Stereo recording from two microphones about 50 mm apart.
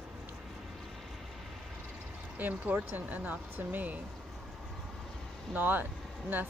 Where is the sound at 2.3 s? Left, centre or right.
Right.